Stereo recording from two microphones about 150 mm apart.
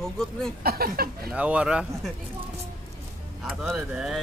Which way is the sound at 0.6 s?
90° right.